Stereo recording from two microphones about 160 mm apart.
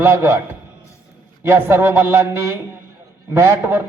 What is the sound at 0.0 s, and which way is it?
Speech, 15° right (ahead or behind).